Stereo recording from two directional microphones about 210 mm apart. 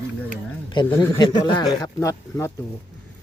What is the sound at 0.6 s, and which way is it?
Speech, 20° left (ahead or behind).